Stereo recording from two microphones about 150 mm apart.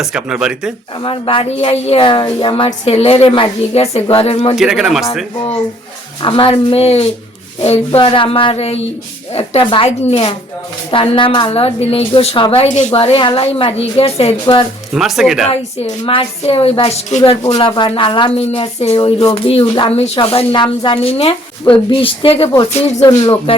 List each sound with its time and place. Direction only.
0.0 s speech: 5° right (ahead or behind)
1.0 s speech: 35° left (ahead or behind)
4.5 s speech: 5° right (ahead or behind)
6.2 s speech: 35° left (ahead or behind)
12.9 s speech: 35° left (ahead or behind)
14.4 s speech: 30° left (ahead or behind)
14.9 s speech: centre (ahead or behind)
16.0 s speech: 40° left (ahead or behind)
17.5 s speech: 35° left (ahead or behind)
23.0 s music: 25° left (ahead or behind)